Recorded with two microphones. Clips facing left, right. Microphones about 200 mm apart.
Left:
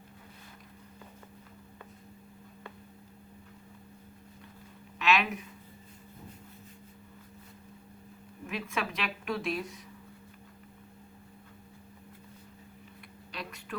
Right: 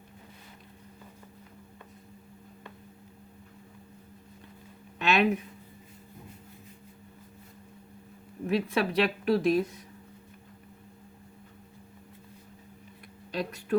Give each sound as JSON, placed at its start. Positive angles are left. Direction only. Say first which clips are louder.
{"t": 4.9, "sound": "speech", "louder": "right 3 dB", "side_deg": -35}
{"t": 8.4, "sound": "a woman's voice", "louder": "right 8 dB", "side_deg": -35}
{"t": 13.3, "sound": "a sound", "louder": "right 10 dB", "side_deg": -40}